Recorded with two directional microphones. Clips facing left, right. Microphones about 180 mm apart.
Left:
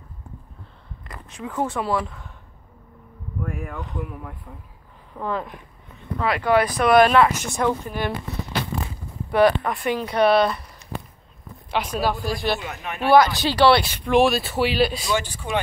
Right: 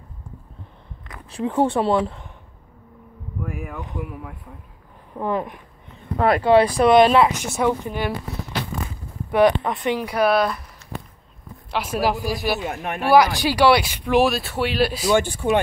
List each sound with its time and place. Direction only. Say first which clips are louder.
1.3 s speech: right 6 dB; 30° right (ahead or behind)
3.4 s speech: even; 5° right (ahead or behind)
5.1 s speech: right 3 dB; 15° right (ahead or behind)
6.1 s speech: right 6 dB; 50° right (ahead or behind)
6.4 s speech: right 3 dB; 30° right (ahead or behind)
7.4 s speech: right 2 dB; 5° right (ahead or behind)
9.3 s speech: right 1 dB; 20° right (ahead or behind); by 10.6 s centre (ahead or behind)
11.7 s speech: right 1 dB; 5° right (ahead or behind)
12.5 s speech: right 5 dB; 40° right (ahead or behind)
13.4 s speech: even; 10° right (ahead or behind)
15.0 s speech: right 7 dB; 50° right (ahead or behind)